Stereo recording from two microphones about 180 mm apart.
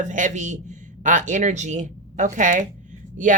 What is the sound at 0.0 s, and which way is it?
Speech, 45° right (ahead or behind).